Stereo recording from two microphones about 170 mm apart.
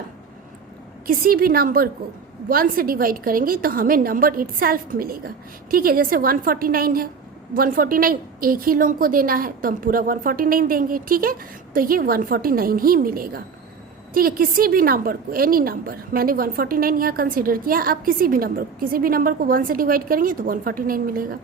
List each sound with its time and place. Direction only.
1.0 s a woman's voice: 60° right (ahead or behind)